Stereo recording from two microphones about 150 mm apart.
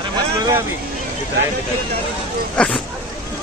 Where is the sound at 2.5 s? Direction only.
5° left (ahead or behind).